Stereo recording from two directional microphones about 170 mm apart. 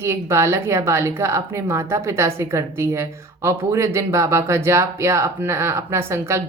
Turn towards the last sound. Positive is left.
turn(degrees=-15)  # may be behind; listen again after turning